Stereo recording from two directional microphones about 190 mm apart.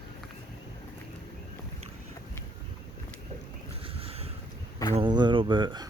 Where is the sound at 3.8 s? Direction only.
30° right (ahead or behind).